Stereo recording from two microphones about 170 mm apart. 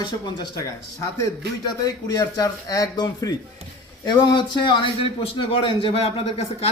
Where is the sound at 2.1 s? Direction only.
20° left (ahead or behind).